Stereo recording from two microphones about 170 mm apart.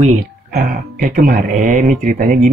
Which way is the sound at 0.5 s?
60° right (ahead or behind).